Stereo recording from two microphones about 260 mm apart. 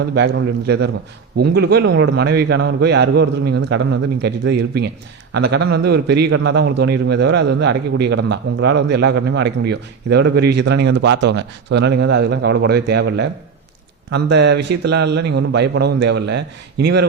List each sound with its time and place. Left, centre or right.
0.1 s a man's voice: right